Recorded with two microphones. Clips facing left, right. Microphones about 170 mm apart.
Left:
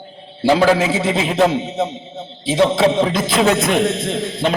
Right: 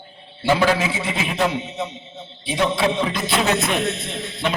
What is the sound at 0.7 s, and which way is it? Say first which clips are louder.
A man's voice: left 6 dB; 90° left.